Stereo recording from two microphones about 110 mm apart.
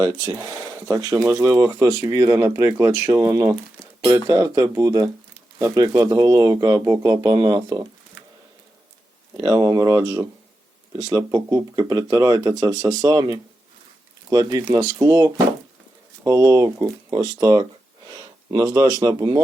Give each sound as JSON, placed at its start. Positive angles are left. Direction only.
{"t": 0.0, "sound": "speech", "side_deg": -35}
{"t": 9.4, "sound": "speech", "side_deg": -35}